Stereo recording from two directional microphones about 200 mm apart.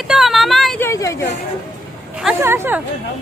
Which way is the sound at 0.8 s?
15° left (ahead or behind).